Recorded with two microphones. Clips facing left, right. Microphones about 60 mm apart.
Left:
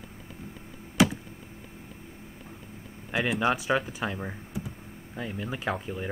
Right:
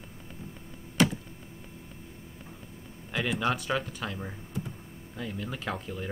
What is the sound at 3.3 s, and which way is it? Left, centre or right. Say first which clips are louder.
Speech: left 4 dB; centre.